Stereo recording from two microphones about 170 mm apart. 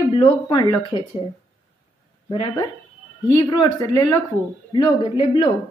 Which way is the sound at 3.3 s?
25° left (ahead or behind).